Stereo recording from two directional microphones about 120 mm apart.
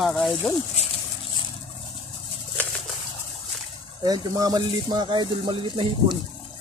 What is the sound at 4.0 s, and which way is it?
Speech, 30° right (ahead or behind).